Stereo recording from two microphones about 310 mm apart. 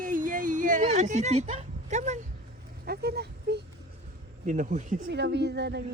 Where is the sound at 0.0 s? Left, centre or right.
Right.